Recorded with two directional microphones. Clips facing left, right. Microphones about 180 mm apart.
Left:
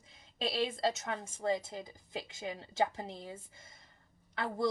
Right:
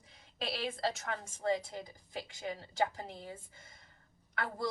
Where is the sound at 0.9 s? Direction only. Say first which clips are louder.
Left 1 dB; 25° left (ahead or behind).